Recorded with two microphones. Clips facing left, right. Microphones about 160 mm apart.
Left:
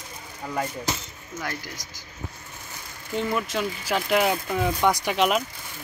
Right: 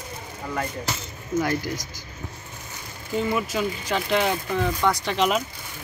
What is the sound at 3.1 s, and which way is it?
Speech, 5° right (ahead or behind).